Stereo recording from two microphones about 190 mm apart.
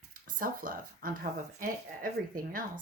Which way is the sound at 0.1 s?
45° right (ahead or behind).